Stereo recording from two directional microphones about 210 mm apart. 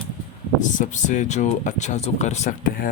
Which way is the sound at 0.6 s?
35° left (ahead or behind).